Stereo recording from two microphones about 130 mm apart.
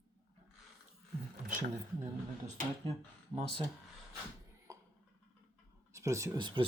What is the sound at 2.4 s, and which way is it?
Speech, 90° right.